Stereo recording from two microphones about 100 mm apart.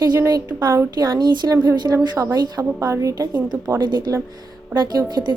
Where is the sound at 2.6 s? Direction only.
30° right (ahead or behind).